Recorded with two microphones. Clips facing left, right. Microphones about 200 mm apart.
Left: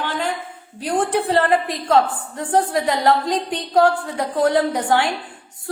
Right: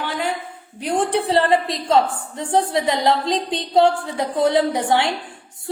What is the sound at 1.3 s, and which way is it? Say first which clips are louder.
A woman's voice: right 1 dB; 15° right (ahead or behind).